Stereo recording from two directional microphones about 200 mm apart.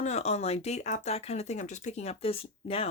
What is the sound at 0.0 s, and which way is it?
Speech, 35° left (ahead or behind).